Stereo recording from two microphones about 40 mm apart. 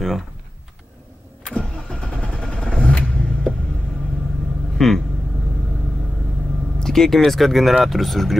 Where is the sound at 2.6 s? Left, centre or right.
Centre.